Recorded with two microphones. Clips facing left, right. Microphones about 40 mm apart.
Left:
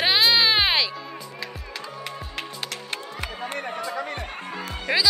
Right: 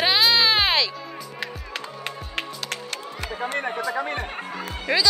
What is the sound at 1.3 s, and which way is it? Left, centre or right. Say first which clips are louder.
Music: right 3 dB; right.